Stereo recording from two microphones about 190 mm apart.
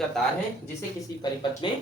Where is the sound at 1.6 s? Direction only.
25° left (ahead or behind).